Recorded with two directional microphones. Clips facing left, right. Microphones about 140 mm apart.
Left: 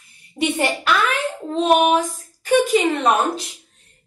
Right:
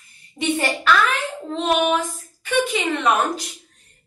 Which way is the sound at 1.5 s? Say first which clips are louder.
Left 4 dB; 40° left (ahead or behind).